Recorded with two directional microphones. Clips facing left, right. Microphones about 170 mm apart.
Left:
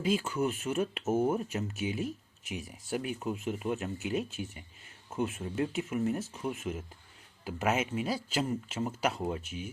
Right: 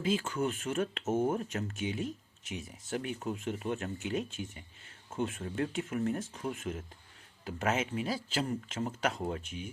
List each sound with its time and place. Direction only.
0.1 s speech: 10° left (ahead or behind)
5.5 s speech: 10° left (ahead or behind)